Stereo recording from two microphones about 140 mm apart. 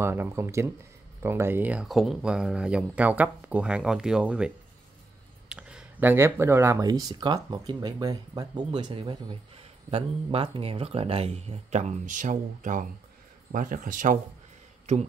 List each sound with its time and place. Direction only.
0.0 s speech: 15° right (ahead or behind)
5.5 s speech: 5° right (ahead or behind); by 14.1 s 70° right (ahead or behind)